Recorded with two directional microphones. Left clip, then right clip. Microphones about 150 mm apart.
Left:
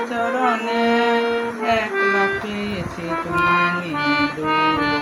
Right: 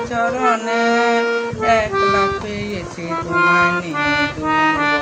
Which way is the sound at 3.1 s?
20° right (ahead or behind).